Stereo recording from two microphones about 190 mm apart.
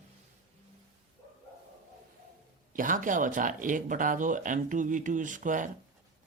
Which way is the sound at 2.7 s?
45° right (ahead or behind).